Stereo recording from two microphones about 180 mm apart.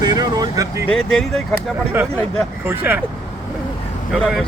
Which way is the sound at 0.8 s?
5° left (ahead or behind).